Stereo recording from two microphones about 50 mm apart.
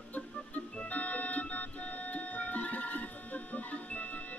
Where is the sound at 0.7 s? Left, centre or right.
Left.